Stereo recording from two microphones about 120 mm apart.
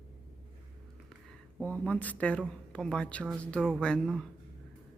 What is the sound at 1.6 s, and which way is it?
Speech, 10° left (ahead or behind).